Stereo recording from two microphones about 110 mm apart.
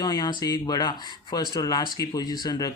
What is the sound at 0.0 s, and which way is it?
A man's voice, 40° left (ahead or behind).